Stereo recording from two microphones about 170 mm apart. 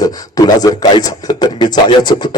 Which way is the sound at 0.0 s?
20° left (ahead or behind).